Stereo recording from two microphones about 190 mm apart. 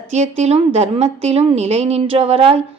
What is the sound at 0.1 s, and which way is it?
A woman's voice, 35° right (ahead or behind).